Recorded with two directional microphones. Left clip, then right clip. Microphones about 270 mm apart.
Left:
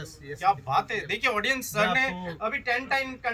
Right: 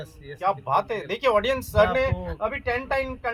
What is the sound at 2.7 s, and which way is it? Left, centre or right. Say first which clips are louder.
Speech: right 1 dB; right.